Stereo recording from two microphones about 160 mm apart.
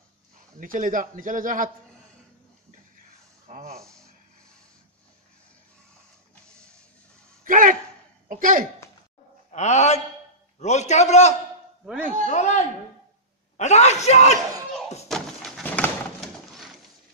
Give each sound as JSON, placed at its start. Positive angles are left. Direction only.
{"t": 0.6, "sound": "a man's voice", "side_deg": -60}
{"t": 3.4, "sound": "speech", "side_deg": -45}
{"t": 7.4, "sound": "a man's voice", "side_deg": -55}
{"t": 9.5, "sound": "a man's voice", "side_deg": 45}
{"t": 11.8, "sound": "a man's voice", "side_deg": -5}
{"t": 12.3, "sound": "a man's voice", "side_deg": 45}
{"t": 15.0, "sound": "pigeon", "side_deg": 0}